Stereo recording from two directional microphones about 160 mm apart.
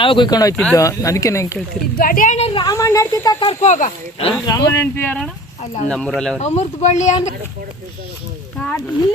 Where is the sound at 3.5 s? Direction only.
45° left (ahead or behind).